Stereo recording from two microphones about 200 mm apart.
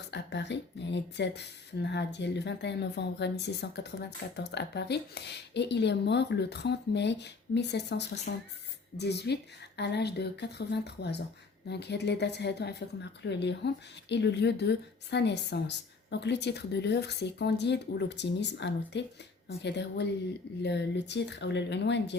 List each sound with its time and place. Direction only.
0.1 s a woman's voice: 60° left (ahead or behind)